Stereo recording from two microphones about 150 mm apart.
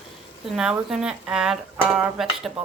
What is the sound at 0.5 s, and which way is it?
A woman's voice, 5° right (ahead or behind).